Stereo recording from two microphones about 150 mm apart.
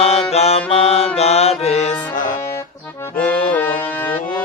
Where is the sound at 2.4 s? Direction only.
20° left (ahead or behind).